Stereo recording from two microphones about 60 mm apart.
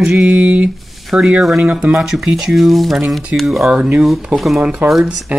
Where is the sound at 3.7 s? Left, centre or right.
Centre.